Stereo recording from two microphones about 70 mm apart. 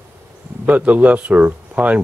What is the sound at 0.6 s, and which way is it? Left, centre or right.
Speech, centre.